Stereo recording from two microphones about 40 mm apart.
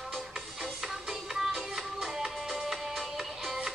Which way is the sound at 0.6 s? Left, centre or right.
Centre.